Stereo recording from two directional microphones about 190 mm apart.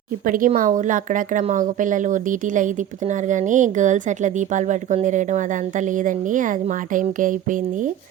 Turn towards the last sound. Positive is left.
turn(degrees=-45)  # may be behind; listen again after turning